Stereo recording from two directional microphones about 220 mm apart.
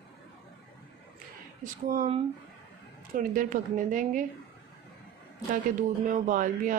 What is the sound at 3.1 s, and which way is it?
Speech, 35° right (ahead or behind).